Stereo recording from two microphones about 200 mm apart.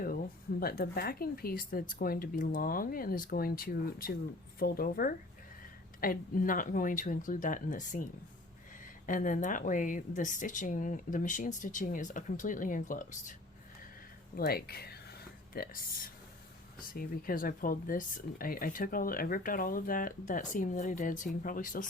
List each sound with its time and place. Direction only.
0.6 s speech: 50° left (ahead or behind)
9.0 s speech: 40° left (ahead or behind)
14.3 s speech: 50° left (ahead or behind)